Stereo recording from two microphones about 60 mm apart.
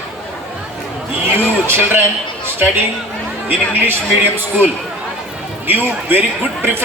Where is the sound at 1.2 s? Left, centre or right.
Right.